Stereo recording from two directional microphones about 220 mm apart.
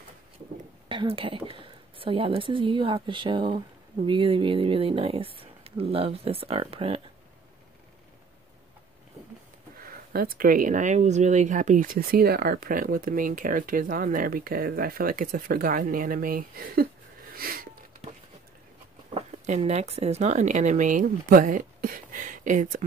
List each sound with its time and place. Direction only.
0.8 s a woman's voice: 25° right (ahead or behind)
9.8 s speech: 40° right (ahead or behind)
17.4 s a sound: 40° right (ahead or behind)
19.1 s speech: 30° right (ahead or behind)